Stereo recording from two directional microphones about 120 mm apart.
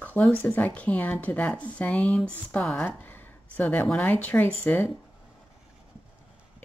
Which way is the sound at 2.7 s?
15° left (ahead or behind).